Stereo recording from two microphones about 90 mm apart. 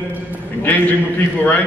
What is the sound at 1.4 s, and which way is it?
Speech, 20° left (ahead or behind).